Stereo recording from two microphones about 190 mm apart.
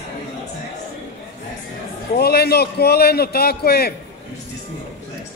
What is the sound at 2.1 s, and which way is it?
A man's voice, 55° left (ahead or behind).